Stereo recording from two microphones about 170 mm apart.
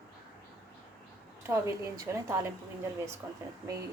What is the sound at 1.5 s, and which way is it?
Speech, 15° right (ahead or behind).